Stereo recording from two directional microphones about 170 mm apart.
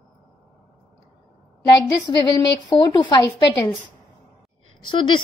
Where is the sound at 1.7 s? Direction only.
25° left (ahead or behind).